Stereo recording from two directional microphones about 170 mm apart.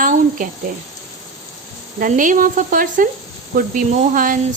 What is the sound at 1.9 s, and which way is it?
Speech, 50° right (ahead or behind).